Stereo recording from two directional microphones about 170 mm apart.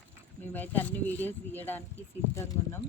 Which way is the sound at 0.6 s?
10° left (ahead or behind).